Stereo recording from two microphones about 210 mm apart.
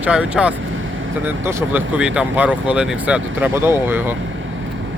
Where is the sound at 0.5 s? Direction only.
65° right (ahead or behind).